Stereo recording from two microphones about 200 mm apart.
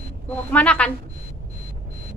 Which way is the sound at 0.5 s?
5° left (ahead or behind).